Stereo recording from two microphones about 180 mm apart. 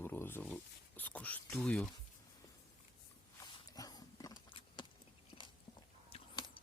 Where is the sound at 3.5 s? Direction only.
20° left (ahead or behind).